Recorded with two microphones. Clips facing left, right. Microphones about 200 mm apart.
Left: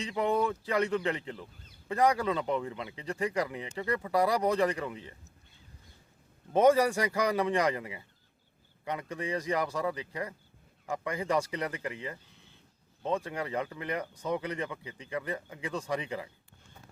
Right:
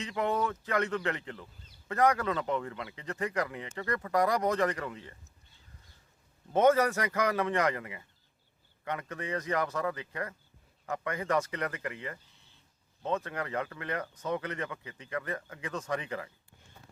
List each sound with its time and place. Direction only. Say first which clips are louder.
0.0 s speech: left 2 dB; 10° left (ahead or behind)
2.7 s speech: left 1 dB; 20° left (ahead or behind)
3.0 s speech: left 2 dB; 10° left (ahead or behind)
6.5 s speech: left 1 dB; 10° left (ahead or behind)
13.0 s speech: left 1 dB; 10° left (ahead or behind)